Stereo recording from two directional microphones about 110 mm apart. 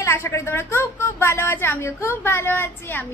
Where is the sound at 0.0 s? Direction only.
25° left (ahead or behind).